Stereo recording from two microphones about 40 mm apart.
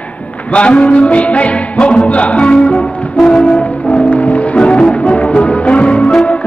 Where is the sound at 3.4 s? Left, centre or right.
Left.